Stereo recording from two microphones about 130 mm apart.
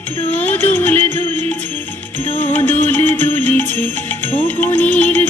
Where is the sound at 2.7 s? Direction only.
15° left (ahead or behind).